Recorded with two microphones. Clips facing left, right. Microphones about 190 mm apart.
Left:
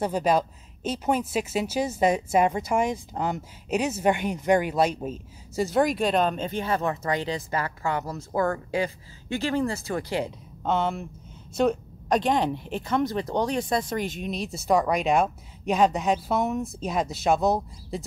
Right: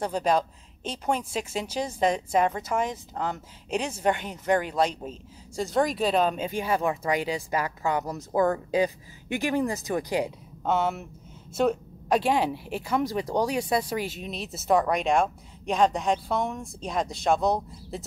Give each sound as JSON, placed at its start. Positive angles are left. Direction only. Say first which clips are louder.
{"t": 0.0, "sound": "speech", "louder": "left 2 dB", "side_deg": 5}
{"t": 10.6, "sound": "speech", "louder": "even", "side_deg": -5}